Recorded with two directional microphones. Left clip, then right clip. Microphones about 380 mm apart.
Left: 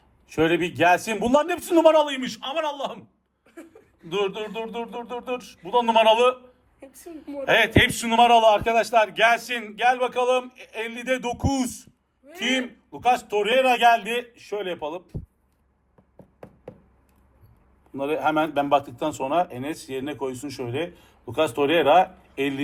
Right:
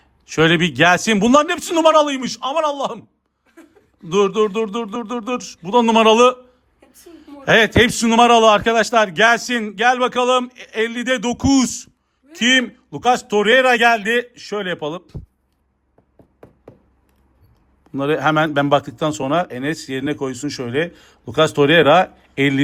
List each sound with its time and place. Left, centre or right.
0.3 s a man's voice: right
4.1 s a man's voice: centre
6.7 s a sound: centre
7.4 s a man's voice: centre
17.9 s a man's voice: right